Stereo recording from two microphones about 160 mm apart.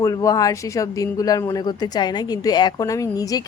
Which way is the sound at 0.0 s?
20° left (ahead or behind).